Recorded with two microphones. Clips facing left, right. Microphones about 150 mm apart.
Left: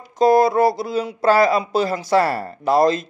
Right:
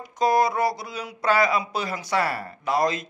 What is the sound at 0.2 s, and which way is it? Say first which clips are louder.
Speech: left 7 dB; 30° left (ahead or behind).